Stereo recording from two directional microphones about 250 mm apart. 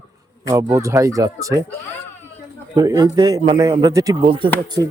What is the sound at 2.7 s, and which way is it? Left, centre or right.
Speech, centre.